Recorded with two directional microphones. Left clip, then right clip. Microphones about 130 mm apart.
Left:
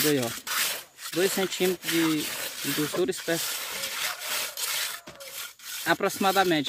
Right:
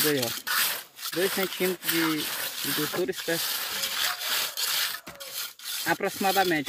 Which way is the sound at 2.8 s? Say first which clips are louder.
Left 3 dB; 25° left (ahead or behind).